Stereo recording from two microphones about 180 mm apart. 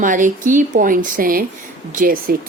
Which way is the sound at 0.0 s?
45° right (ahead or behind).